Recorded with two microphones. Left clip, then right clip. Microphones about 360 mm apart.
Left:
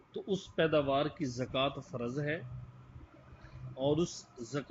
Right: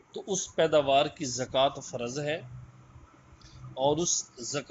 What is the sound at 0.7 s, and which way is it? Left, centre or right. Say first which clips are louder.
Speech: right 9 dB; right.